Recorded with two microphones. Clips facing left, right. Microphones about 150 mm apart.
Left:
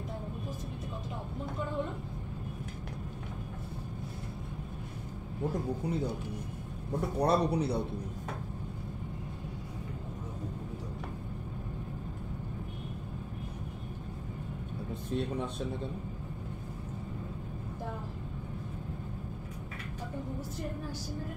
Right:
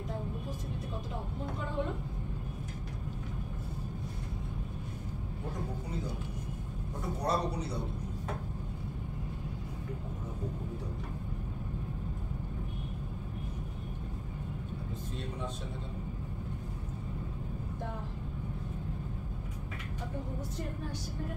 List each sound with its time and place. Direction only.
7.2 s a man's voice: 60° left (ahead or behind)